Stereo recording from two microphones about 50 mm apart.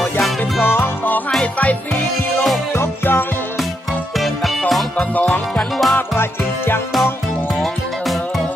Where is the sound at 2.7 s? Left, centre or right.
Left.